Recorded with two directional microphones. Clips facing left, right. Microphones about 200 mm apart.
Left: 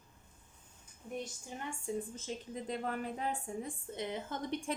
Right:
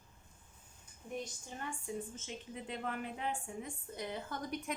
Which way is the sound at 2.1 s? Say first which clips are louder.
Left 4 dB; 35° left (ahead or behind).